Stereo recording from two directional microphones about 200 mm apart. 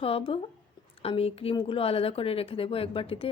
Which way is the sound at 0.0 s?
30° left (ahead or behind).